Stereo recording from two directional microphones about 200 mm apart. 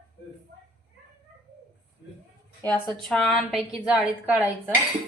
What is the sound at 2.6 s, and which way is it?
Speech, 5° left (ahead or behind).